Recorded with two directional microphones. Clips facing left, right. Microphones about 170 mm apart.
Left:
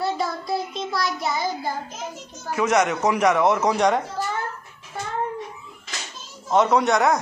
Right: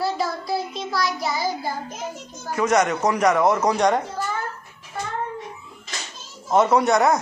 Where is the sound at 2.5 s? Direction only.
5° left (ahead or behind).